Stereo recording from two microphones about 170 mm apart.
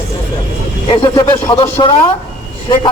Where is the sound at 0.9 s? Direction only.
30° left (ahead or behind).